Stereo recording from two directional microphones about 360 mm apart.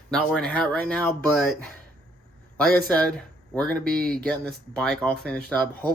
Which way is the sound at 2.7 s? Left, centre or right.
Centre.